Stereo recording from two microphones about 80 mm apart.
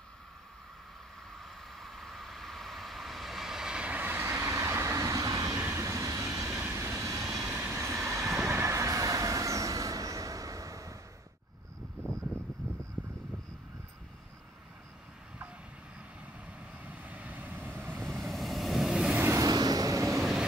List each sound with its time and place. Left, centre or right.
1.3 s vehicle: centre; by 7.6 s right
7.6 s train: right
8.5 s vehicle: right
12.0 s a sound: centre
13.0 s vehicle: centre
16.4 s vehicle: centre
18.2 s vehicle: centre
19.3 s vehicle: right